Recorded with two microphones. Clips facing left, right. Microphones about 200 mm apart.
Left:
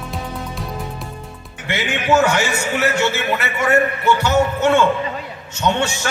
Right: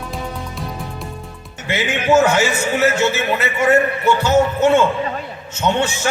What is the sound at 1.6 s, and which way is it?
A man's voice, 20° right (ahead or behind).